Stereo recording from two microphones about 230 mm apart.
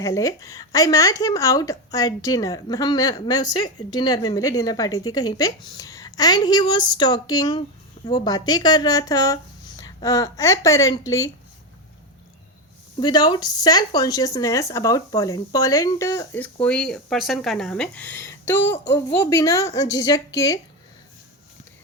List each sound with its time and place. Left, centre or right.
0.0 s speech: centre
13.0 s speech: centre